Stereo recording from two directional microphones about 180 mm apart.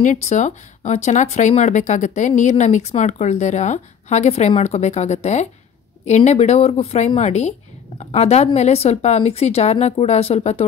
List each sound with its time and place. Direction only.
0.0 s speech: 40° left (ahead or behind)